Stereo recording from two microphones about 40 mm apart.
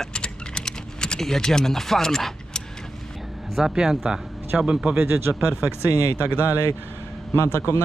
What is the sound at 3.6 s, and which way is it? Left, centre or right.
Speech, centre.